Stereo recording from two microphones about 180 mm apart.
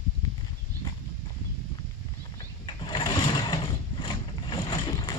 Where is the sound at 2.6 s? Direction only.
25° left (ahead or behind).